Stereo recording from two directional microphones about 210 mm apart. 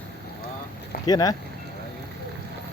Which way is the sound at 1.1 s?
20° left (ahead or behind).